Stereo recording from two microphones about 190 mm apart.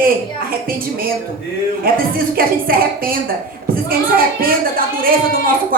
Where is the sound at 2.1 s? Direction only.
50° right (ahead or behind).